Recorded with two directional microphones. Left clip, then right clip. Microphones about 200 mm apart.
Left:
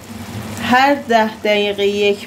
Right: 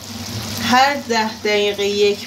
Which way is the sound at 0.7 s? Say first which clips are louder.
Left 3 dB; 65° left (ahead or behind).